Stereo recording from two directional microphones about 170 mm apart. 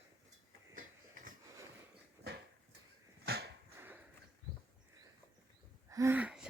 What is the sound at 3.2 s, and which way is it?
Dog, 70° right (ahead or behind).